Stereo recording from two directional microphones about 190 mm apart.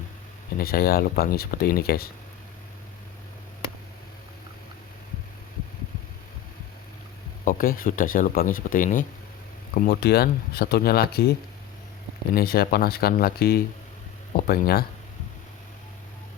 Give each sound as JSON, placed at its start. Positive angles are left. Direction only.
{"t": 0.5, "sound": "speech", "side_deg": 50}
{"t": 7.4, "sound": "speech", "side_deg": 50}